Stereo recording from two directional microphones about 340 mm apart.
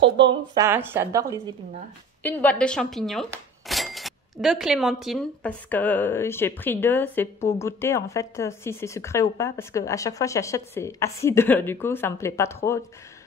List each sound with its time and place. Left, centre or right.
0.0 s speech: right
0.6 s a woman's voice: centre
2.2 s speech: centre